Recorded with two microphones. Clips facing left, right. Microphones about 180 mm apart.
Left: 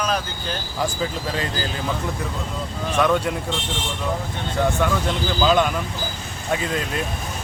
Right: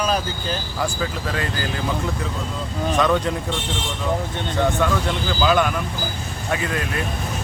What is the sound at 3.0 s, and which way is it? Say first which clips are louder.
Speech: even; 10° left (ahead or behind).